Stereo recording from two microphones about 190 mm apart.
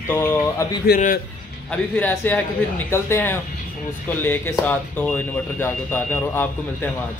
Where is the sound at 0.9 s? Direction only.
55° left (ahead or behind).